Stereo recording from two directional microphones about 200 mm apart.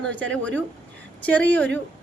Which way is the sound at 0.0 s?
5° left (ahead or behind).